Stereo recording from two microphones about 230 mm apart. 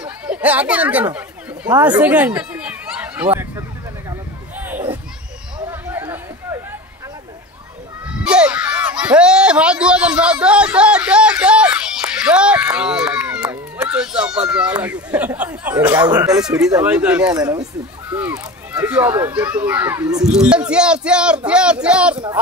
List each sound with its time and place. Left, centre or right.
0.0 s chatter: centre
5.7 s a sound: centre
8.2 s speech: centre
17.3 s speech: centre
20.2 s speech: centre